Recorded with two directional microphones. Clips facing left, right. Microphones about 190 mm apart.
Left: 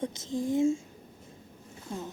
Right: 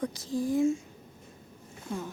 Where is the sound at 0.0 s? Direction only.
25° left (ahead or behind).